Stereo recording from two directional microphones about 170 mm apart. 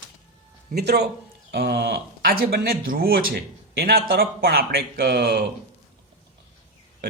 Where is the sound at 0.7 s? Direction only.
70° right (ahead or behind).